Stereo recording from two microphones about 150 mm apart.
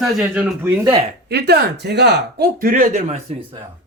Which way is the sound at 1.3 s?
90° right.